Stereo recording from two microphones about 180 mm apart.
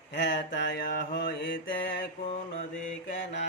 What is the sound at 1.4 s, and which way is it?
Mantra, 90° left.